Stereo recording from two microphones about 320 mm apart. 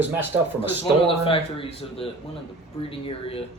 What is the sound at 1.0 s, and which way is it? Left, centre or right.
A man's voice, centre.